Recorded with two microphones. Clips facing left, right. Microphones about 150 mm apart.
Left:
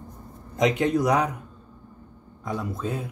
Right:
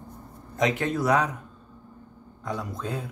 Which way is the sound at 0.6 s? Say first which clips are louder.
Left 3 dB; 15° left (ahead or behind).